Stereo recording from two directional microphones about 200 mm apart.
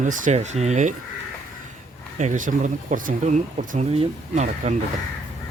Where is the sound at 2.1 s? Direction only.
40° right (ahead or behind).